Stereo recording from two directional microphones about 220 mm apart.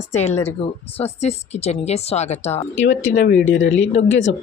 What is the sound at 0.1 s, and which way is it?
Speech, 30° left (ahead or behind).